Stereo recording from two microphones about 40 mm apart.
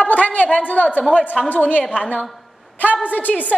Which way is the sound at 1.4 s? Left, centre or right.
Centre.